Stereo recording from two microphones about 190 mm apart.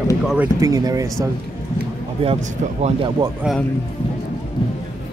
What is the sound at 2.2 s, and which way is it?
Speech, 30° right (ahead or behind).